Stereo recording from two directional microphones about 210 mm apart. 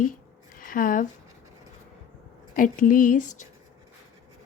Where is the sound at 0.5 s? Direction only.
40° left (ahead or behind).